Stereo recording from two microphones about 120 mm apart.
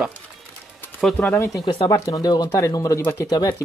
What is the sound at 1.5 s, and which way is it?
Speech, 30° left (ahead or behind).